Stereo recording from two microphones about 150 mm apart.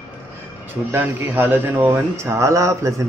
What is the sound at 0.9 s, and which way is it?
Speech, 15° right (ahead or behind).